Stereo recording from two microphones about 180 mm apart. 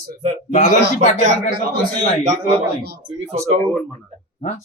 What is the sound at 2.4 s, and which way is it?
Speech, 60° right (ahead or behind).